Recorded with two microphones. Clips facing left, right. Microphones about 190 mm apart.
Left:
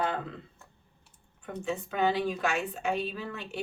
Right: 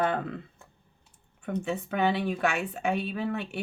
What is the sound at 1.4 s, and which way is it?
A woman's voice, 60° right (ahead or behind).